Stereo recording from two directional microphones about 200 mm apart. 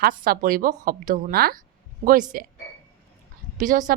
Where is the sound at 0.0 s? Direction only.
45° right (ahead or behind).